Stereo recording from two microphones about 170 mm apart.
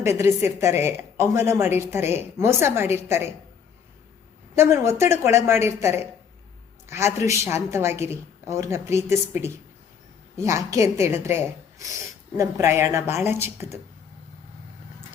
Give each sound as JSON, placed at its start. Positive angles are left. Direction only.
{"t": 0.0, "sound": "a woman's voice", "side_deg": -15}
{"t": 4.5, "sound": "a woman's voice", "side_deg": -15}